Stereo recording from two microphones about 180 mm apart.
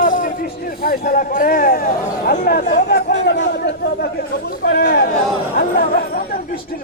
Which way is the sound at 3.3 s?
80° left.